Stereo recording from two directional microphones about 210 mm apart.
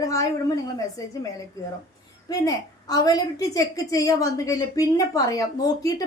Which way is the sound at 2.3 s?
15° left (ahead or behind).